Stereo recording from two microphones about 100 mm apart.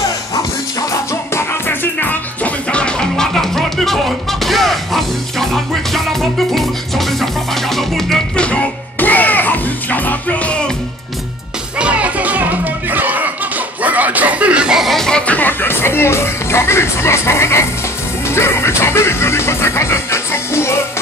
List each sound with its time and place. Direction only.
1.3 s music: 20° left (ahead or behind)
11.8 s music: 15° right (ahead or behind)
13.8 s chuckle: 15° right (ahead or behind); by 17.6 s 25° left (ahead or behind)
18.3 s speech: 25° left (ahead or behind)